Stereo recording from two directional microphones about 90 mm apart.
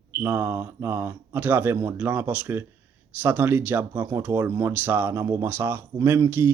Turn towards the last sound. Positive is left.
turn(degrees=-25)  # may be behind; listen again after turning